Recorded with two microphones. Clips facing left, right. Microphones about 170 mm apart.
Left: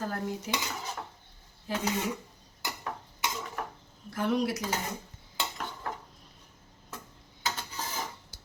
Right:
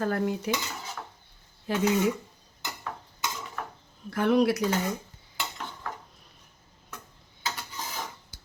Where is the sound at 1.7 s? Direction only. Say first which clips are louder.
Right 5 dB; 65° right (ahead or behind).